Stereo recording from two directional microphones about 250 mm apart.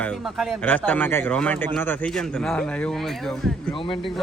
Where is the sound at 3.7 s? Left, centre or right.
Left.